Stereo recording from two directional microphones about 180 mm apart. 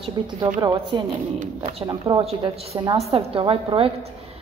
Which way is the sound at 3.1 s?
30° right (ahead or behind).